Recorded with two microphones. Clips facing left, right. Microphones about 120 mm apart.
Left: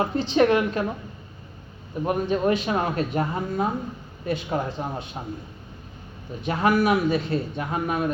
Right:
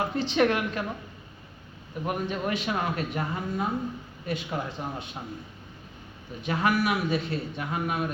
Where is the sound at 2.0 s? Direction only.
35° left (ahead or behind).